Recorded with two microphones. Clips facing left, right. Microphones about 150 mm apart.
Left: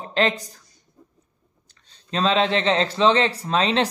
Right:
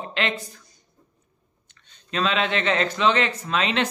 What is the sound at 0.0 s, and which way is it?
Speech, 35° left (ahead or behind).